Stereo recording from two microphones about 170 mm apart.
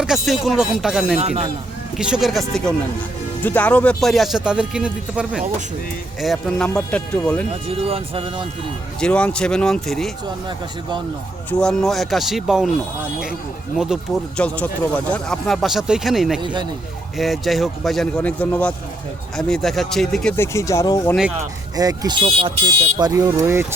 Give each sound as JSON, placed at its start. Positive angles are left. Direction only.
{"t": 0.0, "sound": "speech", "side_deg": 0}
{"t": 1.2, "sound": "speech", "side_deg": -40}
{"t": 2.0, "sound": "speech", "side_deg": -5}
{"t": 7.7, "sound": "speech", "side_deg": -35}
{"t": 9.0, "sound": "speech", "side_deg": 5}
{"t": 11.6, "sound": "speech", "side_deg": 0}
{"t": 13.7, "sound": "speech", "side_deg": -5}
{"t": 14.4, "sound": "speech", "side_deg": 10}
{"t": 16.4, "sound": "speech", "side_deg": -25}
{"t": 17.2, "sound": "speech", "side_deg": 0}
{"t": 20.3, "sound": "speech", "side_deg": 15}
{"t": 21.8, "sound": "speech", "side_deg": -25}